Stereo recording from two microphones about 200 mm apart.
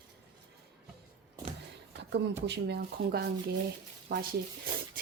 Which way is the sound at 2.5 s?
55° right (ahead or behind).